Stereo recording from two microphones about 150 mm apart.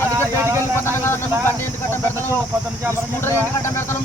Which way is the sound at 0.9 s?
15° left (ahead or behind).